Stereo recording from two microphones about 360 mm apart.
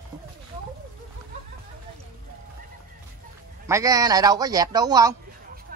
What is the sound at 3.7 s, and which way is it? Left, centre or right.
A man's voice, centre.